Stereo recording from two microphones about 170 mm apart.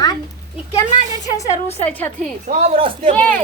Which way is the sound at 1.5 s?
40° left (ahead or behind).